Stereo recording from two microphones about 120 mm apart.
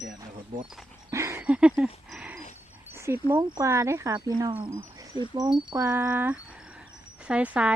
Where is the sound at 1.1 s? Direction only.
25° right (ahead or behind).